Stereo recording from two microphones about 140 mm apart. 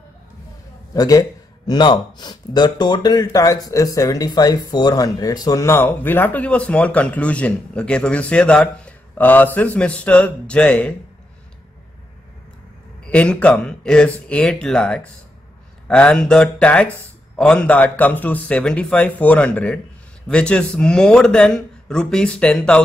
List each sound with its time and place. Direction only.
0.9 s a man's voice: 25° left (ahead or behind)
13.0 s speech: 10° left (ahead or behind)